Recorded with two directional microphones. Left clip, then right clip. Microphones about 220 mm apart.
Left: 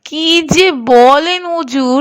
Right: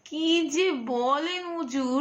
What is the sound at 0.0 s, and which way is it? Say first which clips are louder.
Speech: left 13 dB; 45° left (ahead or behind).